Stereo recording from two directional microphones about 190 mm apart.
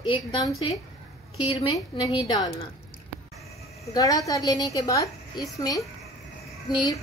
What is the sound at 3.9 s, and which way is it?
A woman's voice, 20° left (ahead or behind).